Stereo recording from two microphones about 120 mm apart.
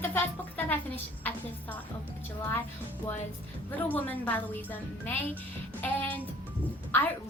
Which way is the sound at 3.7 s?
15° left (ahead or behind).